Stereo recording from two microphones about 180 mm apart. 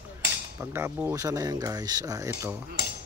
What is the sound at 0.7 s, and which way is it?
Speech, 15° right (ahead or behind).